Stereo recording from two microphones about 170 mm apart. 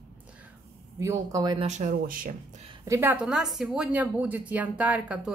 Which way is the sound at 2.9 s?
10° right (ahead or behind).